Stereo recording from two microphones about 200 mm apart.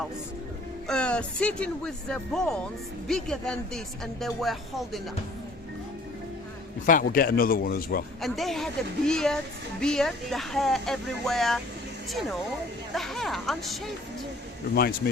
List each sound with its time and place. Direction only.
0.9 s speech: 5° left (ahead or behind)
6.8 s speech: 45° left (ahead or behind)
8.2 s speech: centre (ahead or behind)
12.9 s speech: centre (ahead or behind)
14.8 s speech: 50° left (ahead or behind)